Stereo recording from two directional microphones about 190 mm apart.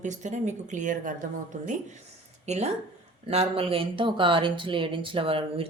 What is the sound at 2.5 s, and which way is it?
Speech, 35° right (ahead or behind).